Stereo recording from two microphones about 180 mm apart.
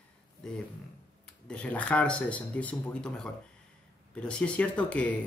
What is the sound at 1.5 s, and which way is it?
Speech, 5° left (ahead or behind).